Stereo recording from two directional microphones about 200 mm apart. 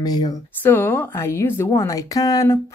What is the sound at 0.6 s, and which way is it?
Speech, 10° left (ahead or behind).